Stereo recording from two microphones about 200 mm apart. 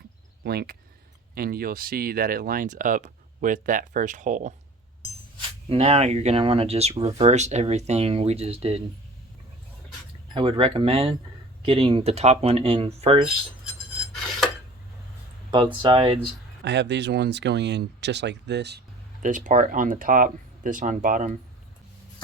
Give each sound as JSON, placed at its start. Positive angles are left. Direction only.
{"t": 0.4, "sound": "speech", "side_deg": -55}
{"t": 5.4, "sound": "speech", "side_deg": -30}
{"t": 10.3, "sound": "speech", "side_deg": -25}
{"t": 15.4, "sound": "speech", "side_deg": -25}
{"t": 16.6, "sound": "speech", "side_deg": -60}
{"t": 19.2, "sound": "speech", "side_deg": -40}